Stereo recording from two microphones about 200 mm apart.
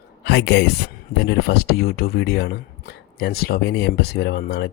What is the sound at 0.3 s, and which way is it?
Speech, 55° left (ahead or behind).